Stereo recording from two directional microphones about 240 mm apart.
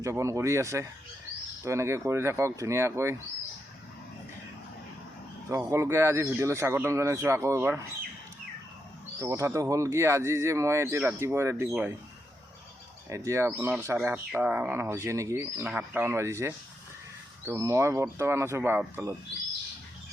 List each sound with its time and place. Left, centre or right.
0.0 s speech: centre
5.5 s speech: centre
9.2 s speech: centre
13.1 s speech: centre